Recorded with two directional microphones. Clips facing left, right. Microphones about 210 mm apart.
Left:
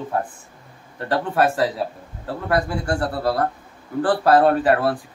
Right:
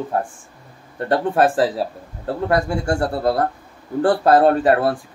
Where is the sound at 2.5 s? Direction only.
25° right (ahead or behind).